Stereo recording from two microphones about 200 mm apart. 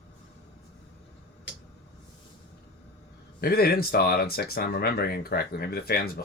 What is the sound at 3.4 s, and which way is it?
Speech, 50° left (ahead or behind).